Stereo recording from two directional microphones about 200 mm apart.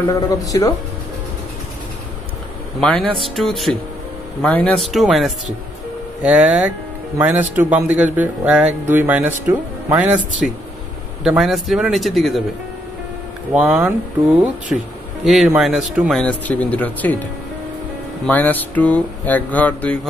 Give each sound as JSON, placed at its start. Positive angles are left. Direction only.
{"t": 0.1, "sound": "mantra", "side_deg": 15}
{"t": 2.8, "sound": "speech", "side_deg": 5}
{"t": 11.2, "sound": "speech", "side_deg": 0}
{"t": 13.5, "sound": "speech", "side_deg": 0}
{"t": 15.2, "sound": "speech", "side_deg": 0}
{"t": 18.2, "sound": "mantra", "side_deg": 10}